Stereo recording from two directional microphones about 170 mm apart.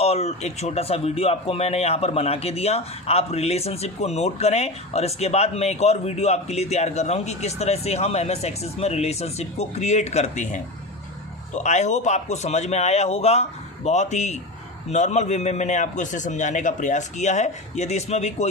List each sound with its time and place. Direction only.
0.0 s a man's voice: 40° left (ahead or behind)